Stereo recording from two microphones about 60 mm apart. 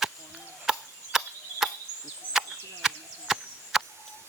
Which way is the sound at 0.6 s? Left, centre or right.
Centre.